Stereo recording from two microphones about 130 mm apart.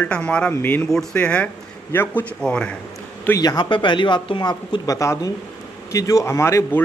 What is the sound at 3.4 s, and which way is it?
Speech, 30° left (ahead or behind).